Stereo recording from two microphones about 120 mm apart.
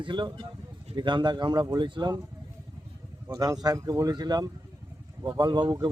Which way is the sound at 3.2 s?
30° right (ahead or behind).